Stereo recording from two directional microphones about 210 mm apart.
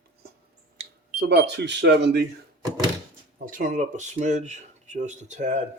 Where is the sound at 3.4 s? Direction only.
40° right (ahead or behind).